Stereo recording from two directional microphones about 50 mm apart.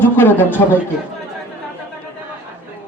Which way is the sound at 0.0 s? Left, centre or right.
Left.